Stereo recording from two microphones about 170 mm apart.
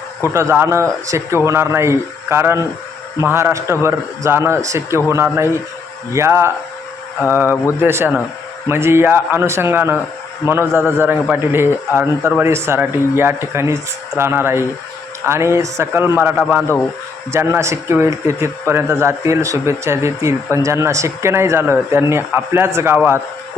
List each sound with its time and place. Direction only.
0.3 s a man's voice: 15° right (ahead or behind)
7.4 s a man's voice: 15° left (ahead or behind)
7.8 s a man's voice: 15° right (ahead or behind)